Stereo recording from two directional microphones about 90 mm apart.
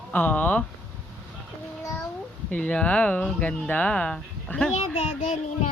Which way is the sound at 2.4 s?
15° left (ahead or behind).